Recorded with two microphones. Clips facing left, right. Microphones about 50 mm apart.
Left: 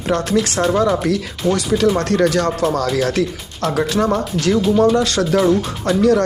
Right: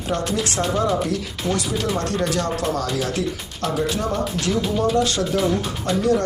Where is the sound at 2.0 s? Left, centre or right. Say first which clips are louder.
Left 7 dB; left.